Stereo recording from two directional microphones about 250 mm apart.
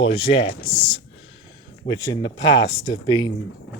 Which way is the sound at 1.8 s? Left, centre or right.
Centre.